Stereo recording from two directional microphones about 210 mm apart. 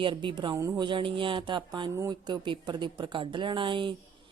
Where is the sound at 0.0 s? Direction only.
25° right (ahead or behind).